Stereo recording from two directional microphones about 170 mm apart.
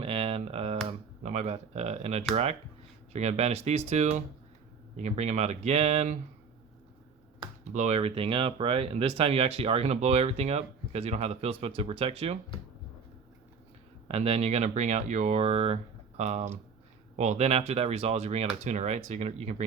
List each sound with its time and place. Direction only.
0.0 s a sound: 35° right (ahead or behind)
0.9 s computer keyboard: 40° right (ahead or behind)
2.3 s speech: 40° right (ahead or behind)
7.3 s speech: 40° right (ahead or behind)
14.1 s speech: 35° right (ahead or behind)